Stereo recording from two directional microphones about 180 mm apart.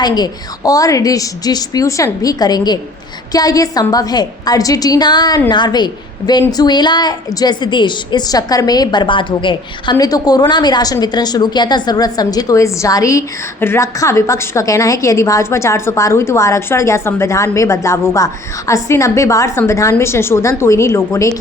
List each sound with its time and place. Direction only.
0.0 s a woman's voice: 20° left (ahead or behind)